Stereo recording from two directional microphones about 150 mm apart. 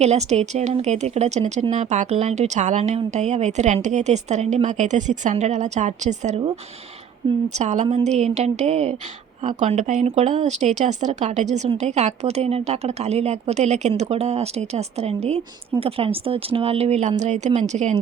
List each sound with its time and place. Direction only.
0.0 s speech: 45° right (ahead or behind)
7.5 s speech: 50° right (ahead or behind)